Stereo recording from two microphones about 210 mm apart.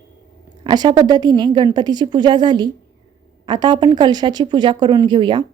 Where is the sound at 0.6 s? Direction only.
20° right (ahead or behind).